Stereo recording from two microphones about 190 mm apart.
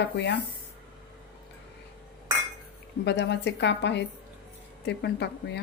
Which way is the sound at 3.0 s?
65° left (ahead or behind).